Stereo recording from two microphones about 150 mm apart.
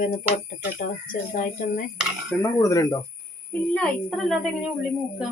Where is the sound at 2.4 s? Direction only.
20° left (ahead or behind).